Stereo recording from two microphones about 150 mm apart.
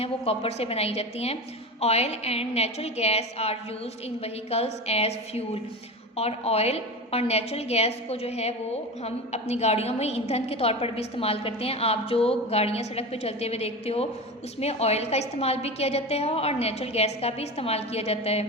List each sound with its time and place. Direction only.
0.0 s a woman's voice: 40° left (ahead or behind)